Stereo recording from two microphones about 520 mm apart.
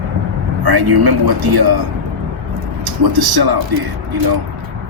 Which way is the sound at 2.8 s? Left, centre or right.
Right.